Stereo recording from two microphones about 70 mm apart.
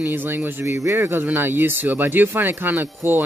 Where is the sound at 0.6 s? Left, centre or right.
Right.